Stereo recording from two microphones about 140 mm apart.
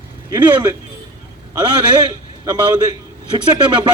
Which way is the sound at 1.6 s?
30° right (ahead or behind).